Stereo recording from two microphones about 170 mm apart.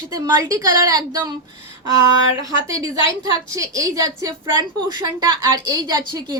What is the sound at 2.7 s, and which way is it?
A woman's voice, 20° right (ahead or behind).